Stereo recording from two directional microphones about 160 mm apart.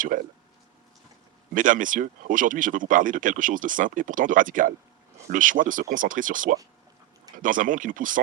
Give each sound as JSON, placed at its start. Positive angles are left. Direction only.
{"t": 0.1, "sound": "speech", "side_deg": -55}
{"t": 1.5, "sound": "speech", "side_deg": -55}